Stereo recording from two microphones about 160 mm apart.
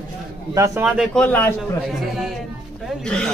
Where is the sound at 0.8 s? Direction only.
5° right (ahead or behind).